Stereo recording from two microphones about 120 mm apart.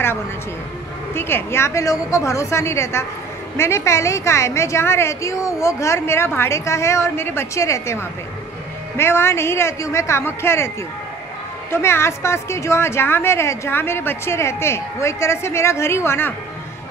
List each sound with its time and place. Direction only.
1.1 s a woman's voice: 20° left (ahead or behind)
11.7 s a woman's voice: 20° left (ahead or behind)